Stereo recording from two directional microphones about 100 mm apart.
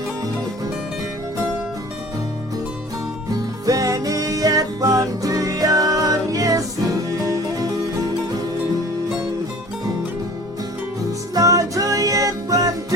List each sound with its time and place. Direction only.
3.3 s music: 35° right (ahead or behind)
11.3 s music: 35° right (ahead or behind)